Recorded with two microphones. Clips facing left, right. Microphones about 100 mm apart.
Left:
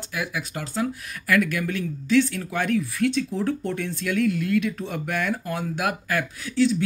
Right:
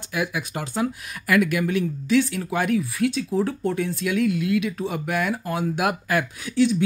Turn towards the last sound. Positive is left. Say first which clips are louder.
# right 1 dB
turn(degrees=-20)  # may be behind; listen again after turning